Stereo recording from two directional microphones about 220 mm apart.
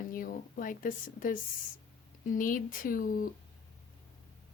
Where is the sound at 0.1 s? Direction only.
40° left (ahead or behind).